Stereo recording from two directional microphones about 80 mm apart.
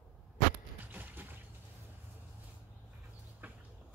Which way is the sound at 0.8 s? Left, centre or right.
Right.